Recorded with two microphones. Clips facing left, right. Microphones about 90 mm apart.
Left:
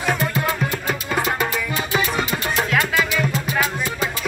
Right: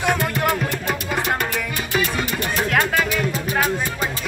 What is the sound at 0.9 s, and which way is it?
Music, 5° left (ahead or behind).